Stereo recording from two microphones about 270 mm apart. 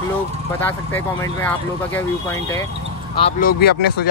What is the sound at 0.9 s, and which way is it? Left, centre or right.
Speech, centre.